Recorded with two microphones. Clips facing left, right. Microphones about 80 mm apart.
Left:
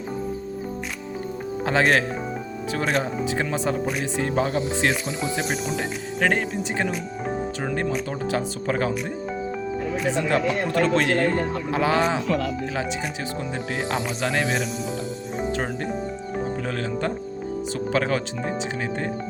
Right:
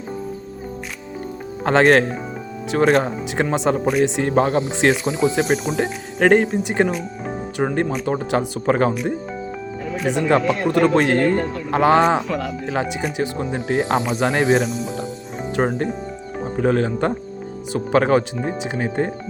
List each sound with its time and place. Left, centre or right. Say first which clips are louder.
1.6 s speech: right 6 dB; right
3.7 s speech: right 7 dB; right
10.2 s speech: right 5 dB; right
13.4 s speech: right 6 dB; right
15.5 s speech: right 6 dB; right